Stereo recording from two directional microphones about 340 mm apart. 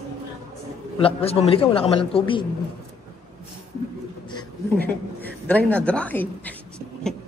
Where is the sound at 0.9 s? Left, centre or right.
Centre.